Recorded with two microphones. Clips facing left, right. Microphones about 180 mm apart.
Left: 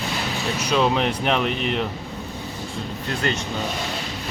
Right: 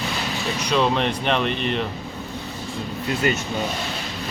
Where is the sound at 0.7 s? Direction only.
5° left (ahead or behind).